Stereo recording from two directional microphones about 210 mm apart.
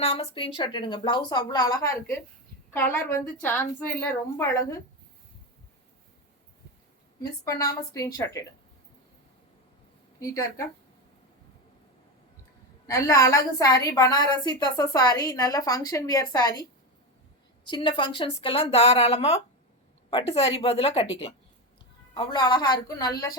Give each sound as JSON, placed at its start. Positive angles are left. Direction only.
{"t": 0.0, "sound": "a woman's voice", "side_deg": 25}
{"t": 7.2, "sound": "a woman's voice", "side_deg": 15}
{"t": 12.9, "sound": "a woman's voice", "side_deg": 15}
{"t": 17.7, "sound": "a woman's voice", "side_deg": 20}